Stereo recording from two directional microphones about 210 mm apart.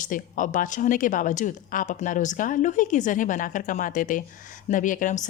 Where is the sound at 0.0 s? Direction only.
40° left (ahead or behind).